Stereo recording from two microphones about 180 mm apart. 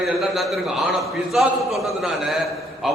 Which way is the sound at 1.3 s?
Centre (ahead or behind).